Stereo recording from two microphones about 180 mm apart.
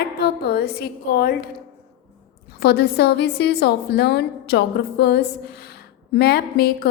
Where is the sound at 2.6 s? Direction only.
65° left (ahead or behind).